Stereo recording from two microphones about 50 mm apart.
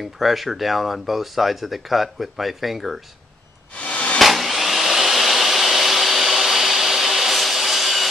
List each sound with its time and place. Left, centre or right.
0.2 s speech: centre
3.7 s a sound: left
4.2 s vacuum cleaner: centre